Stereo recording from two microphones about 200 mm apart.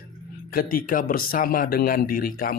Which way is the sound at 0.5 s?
45° left (ahead or behind).